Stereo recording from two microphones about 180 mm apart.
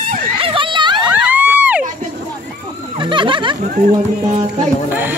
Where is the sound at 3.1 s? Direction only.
25° right (ahead or behind).